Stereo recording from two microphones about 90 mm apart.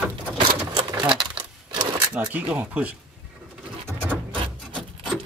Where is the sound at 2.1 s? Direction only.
15° right (ahead or behind).